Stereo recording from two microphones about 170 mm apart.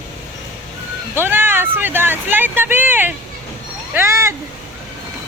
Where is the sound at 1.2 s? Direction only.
10° right (ahead or behind).